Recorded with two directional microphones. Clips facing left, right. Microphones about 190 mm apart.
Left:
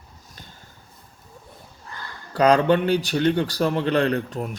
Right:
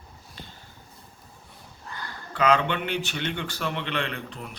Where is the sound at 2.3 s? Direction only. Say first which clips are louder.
Left 6 dB; 40° left (ahead or behind).